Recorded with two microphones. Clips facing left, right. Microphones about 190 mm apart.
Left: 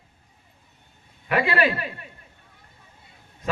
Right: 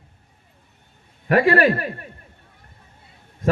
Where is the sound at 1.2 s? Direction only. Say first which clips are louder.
Right 6 dB; 45° right (ahead or behind).